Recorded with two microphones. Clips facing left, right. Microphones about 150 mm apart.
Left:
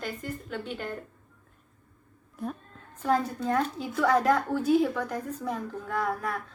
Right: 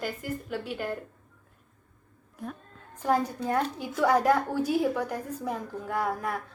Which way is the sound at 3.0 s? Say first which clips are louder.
Even; 15° right (ahead or behind).